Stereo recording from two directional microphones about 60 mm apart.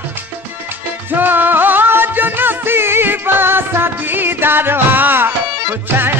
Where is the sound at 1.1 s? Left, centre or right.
Right.